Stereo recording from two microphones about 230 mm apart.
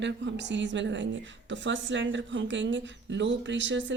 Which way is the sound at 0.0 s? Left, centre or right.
Right.